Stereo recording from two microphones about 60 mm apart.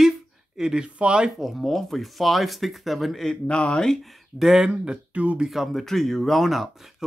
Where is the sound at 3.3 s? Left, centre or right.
Centre.